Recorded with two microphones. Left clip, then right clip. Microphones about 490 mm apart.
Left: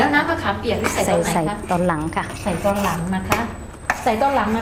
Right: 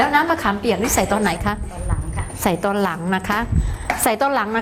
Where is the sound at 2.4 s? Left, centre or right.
Right.